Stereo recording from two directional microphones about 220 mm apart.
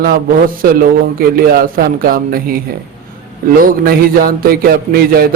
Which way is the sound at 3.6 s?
40° right (ahead or behind).